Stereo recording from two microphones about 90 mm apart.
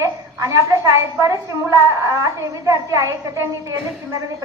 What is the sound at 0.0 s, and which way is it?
A woman's voice, 40° right (ahead or behind).